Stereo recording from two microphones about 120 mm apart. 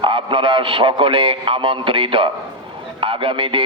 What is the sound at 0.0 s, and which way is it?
A man's voice, 45° right (ahead or behind).